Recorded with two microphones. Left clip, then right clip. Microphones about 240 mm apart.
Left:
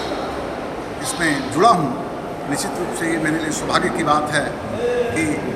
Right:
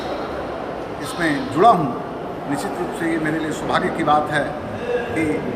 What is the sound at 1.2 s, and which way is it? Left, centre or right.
Speech, centre.